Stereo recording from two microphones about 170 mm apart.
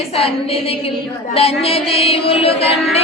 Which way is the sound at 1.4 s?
35° left (ahead or behind).